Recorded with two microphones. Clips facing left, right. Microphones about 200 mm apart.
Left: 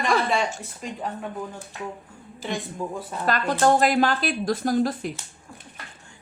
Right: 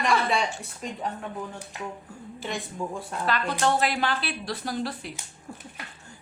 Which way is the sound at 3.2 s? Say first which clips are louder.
Left 5 dB; 45° left (ahead or behind).